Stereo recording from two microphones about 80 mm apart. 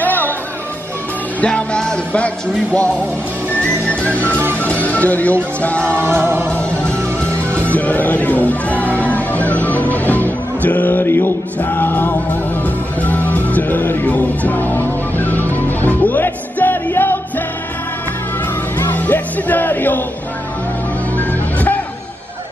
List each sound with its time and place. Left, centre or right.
0.0 s music: left
1.4 s music: centre
5.9 s music: right
6.8 s music: centre
18.8 s music: left
21.2 s music: left